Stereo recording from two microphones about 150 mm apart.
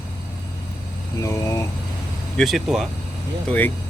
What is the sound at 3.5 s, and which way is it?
Speech, 10° left (ahead or behind).